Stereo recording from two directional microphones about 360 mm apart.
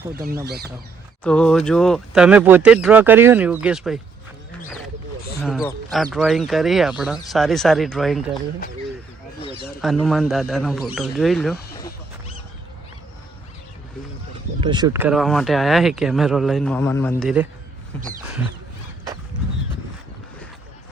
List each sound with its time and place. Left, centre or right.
0.1 s speech: right
1.2 s speech: centre
5.4 s speech: centre
9.5 s speech: left
9.8 s speech: centre
14.6 s speech: centre